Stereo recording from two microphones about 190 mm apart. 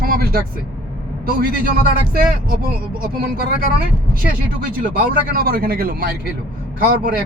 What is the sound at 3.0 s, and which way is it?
Speech, 50° right (ahead or behind).